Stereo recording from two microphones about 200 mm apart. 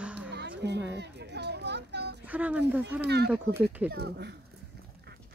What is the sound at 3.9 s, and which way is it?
Speech, 55° right (ahead or behind).